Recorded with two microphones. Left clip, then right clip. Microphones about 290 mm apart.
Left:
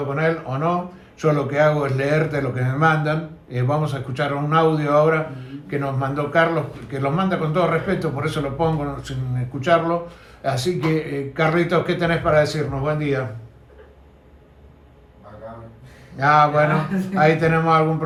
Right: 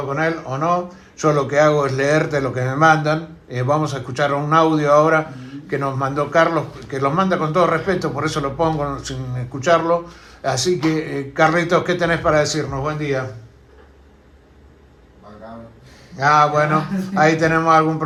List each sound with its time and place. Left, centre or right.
0.1 s a man's voice: right
16.1 s a man's voice: right